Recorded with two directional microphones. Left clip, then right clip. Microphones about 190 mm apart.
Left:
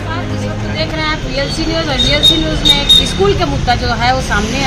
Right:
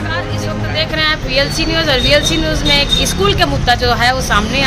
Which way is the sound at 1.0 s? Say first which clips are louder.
Right 5 dB; 25° right (ahead or behind).